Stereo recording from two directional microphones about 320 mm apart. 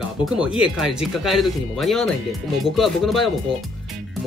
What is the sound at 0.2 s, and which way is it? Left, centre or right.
Speech, centre.